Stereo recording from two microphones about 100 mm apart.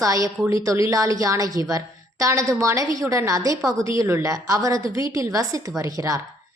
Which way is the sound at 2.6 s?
30° right (ahead or behind).